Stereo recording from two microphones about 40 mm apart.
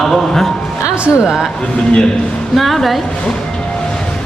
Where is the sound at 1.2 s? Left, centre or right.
Centre.